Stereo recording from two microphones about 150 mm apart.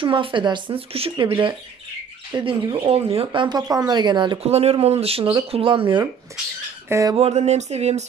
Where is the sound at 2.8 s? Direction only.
40° right (ahead or behind).